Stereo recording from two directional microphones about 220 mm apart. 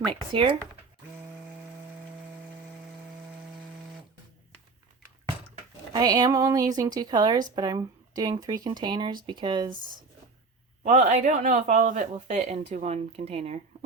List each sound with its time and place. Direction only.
5.9 s a woman's voice: 20° right (ahead or behind)
10.8 s speech: 35° right (ahead or behind)